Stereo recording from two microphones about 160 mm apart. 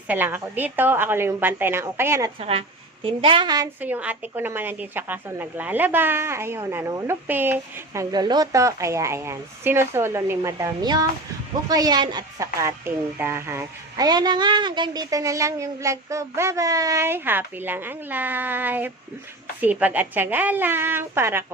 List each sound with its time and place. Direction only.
0.1 s speech: 10° right (ahead or behind)
2.4 s a woman's voice: 35° right (ahead or behind)
3.8 s speech: 10° right (ahead or behind)
8.1 s a woman's voice: 25° right (ahead or behind)